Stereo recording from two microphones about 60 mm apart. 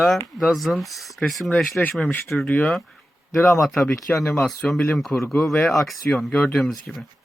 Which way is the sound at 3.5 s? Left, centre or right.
Centre.